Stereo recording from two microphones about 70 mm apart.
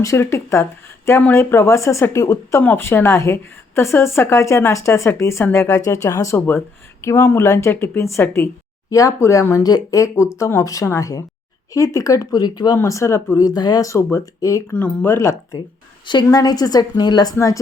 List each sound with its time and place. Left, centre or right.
0.0 s speech: left
1.7 s speech: left
2.6 s speech: left
6.3 s speech: left
7.0 s speech: left
7.7 s speech: left
8.9 s speech: left
9.6 s speech: left
12.7 s speech: left
13.4 s a woman's voice: left
13.8 s speech: left
16.0 s a woman's voice: left